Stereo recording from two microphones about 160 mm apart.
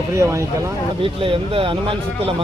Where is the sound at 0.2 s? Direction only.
20° right (ahead or behind).